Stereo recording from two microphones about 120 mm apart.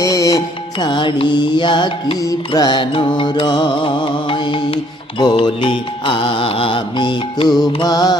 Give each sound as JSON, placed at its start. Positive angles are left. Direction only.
{"t": 0.0, "sound": "music", "side_deg": 30}